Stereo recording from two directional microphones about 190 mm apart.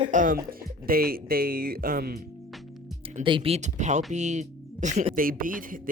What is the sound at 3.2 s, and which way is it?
Speech, 30° right (ahead or behind).